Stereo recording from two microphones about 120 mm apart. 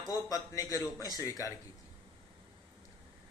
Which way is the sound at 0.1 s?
30° left (ahead or behind).